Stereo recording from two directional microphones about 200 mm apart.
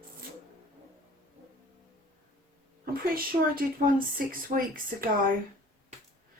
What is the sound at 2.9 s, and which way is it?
A woman's voice, 45° right (ahead or behind).